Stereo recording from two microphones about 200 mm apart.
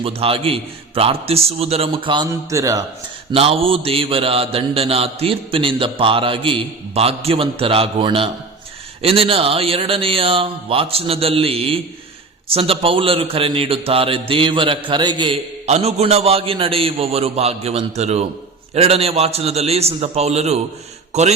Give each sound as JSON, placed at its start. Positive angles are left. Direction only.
{"t": 0.0, "sound": "mantra", "side_deg": -30}
{"t": 3.3, "sound": "mantra", "side_deg": -30}
{"t": 14.8, "sound": "a man's voice", "side_deg": -25}